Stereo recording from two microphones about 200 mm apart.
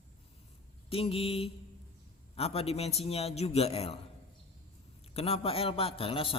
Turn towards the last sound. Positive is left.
turn(degrees=25)  # may be behind; listen again after turning